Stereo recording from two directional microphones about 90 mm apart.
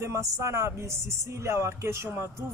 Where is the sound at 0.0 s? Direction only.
30° right (ahead or behind).